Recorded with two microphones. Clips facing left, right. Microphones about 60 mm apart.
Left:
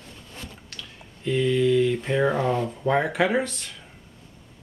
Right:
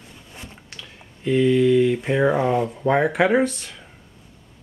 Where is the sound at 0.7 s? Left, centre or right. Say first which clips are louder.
Right 1 dB; centre.